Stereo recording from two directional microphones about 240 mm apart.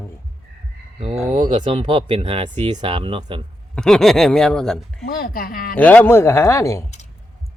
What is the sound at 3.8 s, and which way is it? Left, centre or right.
Speech, centre.